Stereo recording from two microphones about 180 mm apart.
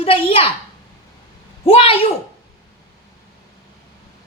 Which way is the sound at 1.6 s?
30° left (ahead or behind).